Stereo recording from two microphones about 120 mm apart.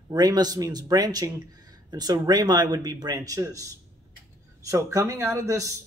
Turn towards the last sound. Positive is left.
turn(degrees=-25)  # may be behind; listen again after turning